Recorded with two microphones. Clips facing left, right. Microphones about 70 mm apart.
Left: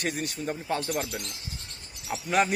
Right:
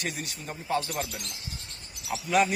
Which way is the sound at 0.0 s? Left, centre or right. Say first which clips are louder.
Left 5 dB; left.